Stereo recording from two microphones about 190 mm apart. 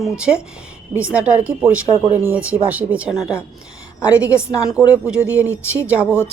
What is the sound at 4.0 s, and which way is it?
Speech, 15° left (ahead or behind).